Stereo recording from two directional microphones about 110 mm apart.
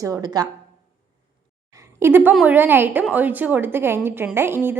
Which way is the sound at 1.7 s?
25° right (ahead or behind).